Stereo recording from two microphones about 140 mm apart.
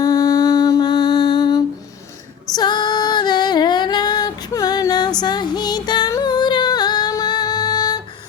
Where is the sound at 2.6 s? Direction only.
30° left (ahead or behind).